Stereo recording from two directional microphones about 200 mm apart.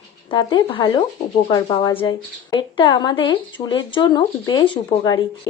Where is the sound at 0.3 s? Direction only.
25° left (ahead or behind).